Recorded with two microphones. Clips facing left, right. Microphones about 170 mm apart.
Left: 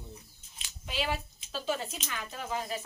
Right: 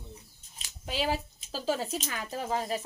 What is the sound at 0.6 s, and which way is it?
Speech, 40° right (ahead or behind).